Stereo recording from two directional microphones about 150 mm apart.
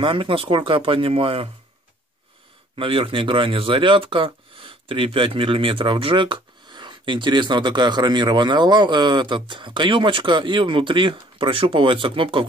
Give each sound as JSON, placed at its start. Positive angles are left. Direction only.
{"t": 0.0, "sound": "speech", "side_deg": -35}
{"t": 2.7, "sound": "speech", "side_deg": -35}